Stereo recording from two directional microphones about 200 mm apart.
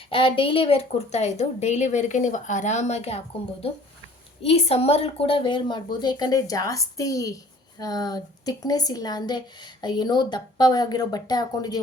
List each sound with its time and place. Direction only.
0.1 s a woman's voice: 25° left (ahead or behind)